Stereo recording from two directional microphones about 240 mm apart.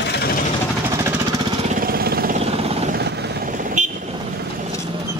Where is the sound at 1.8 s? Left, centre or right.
Right.